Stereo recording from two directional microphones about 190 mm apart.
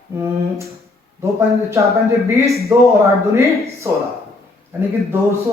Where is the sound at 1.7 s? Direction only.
15° right (ahead or behind).